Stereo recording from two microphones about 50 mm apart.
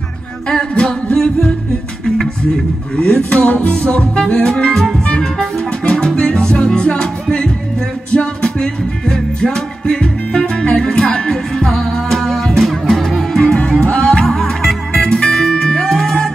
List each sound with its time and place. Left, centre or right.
0.5 s music: centre
1.1 s singing: centre
2.0 s music: centre
4.2 s music: centre
13.6 s music: left